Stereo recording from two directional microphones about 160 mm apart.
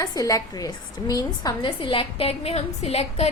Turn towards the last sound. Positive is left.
turn(degrees=40)  # may be behind; listen again after turning